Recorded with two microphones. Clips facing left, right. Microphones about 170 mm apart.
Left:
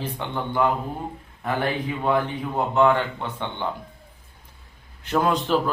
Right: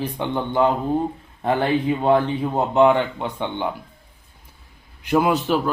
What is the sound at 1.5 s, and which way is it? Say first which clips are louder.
Mantra: right 5 dB; 25° right (ahead or behind).